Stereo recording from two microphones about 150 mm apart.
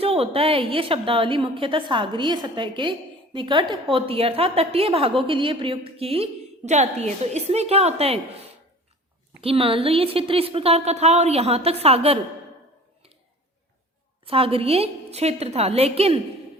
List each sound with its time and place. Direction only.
0.0 s a woman's voice: 40° right (ahead or behind)
9.4 s a woman's voice: 40° right (ahead or behind)
14.3 s a woman's voice: 40° right (ahead or behind)